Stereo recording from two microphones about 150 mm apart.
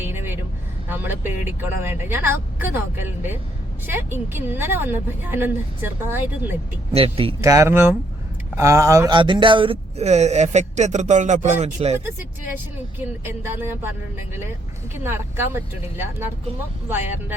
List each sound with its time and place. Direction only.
0.0 s music: 15° right (ahead or behind)
0.9 s a woman's voice: 15° right (ahead or behind)
6.9 s speech: 40° right (ahead or behind)
7.4 s a woman's voice: 20° right (ahead or behind)
9.1 s speech: 35° right (ahead or behind)
13.2 s a woman's voice: 15° right (ahead or behind)